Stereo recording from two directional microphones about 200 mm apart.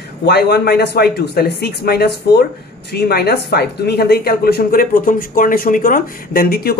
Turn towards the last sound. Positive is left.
turn(degrees=50)  # may be behind; listen again after turning